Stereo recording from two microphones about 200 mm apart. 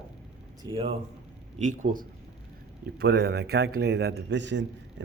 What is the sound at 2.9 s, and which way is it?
A man's voice, 55° right (ahead or behind).